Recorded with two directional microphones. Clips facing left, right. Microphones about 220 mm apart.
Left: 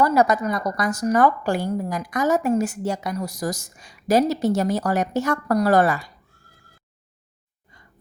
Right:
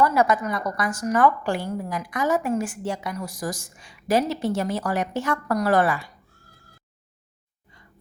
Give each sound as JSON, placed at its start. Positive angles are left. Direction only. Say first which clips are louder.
{"t": 0.0, "sound": "a woman's voice", "louder": "left 2 dB", "side_deg": 40}